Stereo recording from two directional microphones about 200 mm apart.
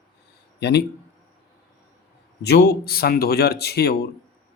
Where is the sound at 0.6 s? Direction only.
55° left (ahead or behind).